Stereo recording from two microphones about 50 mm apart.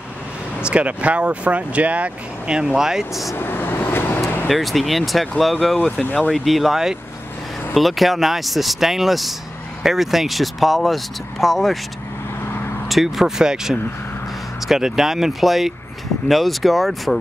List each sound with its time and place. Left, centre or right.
0.6 s speech: right; by 3.3 s centre
3.3 s vehicle: left
4.5 s speech: centre
5.8 s speech: left
6.3 s speech: centre
12.8 s speech: centre